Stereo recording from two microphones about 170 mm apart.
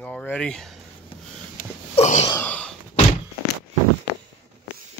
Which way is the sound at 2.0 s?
40° left (ahead or behind).